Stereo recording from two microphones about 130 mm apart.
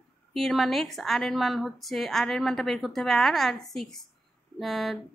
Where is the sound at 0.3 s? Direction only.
Centre (ahead or behind).